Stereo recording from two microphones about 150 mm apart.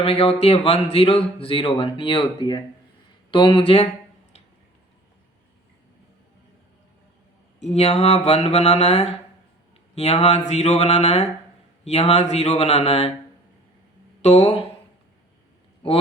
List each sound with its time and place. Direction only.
0.0 s speech: 40° left (ahead or behind)
7.6 s mantra: 45° left (ahead or behind)
14.2 s speech: 45° left (ahead or behind)